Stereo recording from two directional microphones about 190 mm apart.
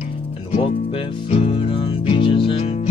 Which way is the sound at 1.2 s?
30° left (ahead or behind).